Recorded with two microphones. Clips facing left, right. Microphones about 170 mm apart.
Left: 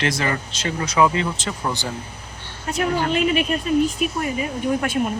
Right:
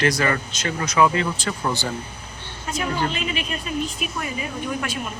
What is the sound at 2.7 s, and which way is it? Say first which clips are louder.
Speech: left 5 dB; 55° left (ahead or behind).